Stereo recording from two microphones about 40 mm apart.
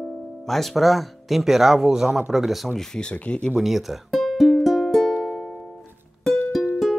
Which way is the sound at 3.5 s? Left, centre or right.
Centre.